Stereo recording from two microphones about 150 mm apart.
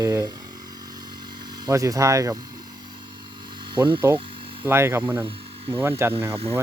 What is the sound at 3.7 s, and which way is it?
Speech, 30° right (ahead or behind).